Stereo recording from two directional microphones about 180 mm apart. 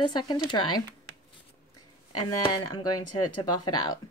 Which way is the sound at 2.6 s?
20° left (ahead or behind).